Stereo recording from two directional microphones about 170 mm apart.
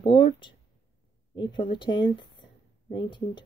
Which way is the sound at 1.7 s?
30° left (ahead or behind).